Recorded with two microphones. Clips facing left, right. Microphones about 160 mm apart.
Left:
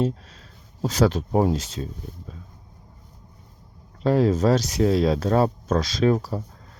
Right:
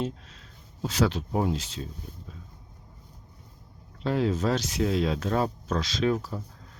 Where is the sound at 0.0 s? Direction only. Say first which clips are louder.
Left 7 dB; 40° left (ahead or behind).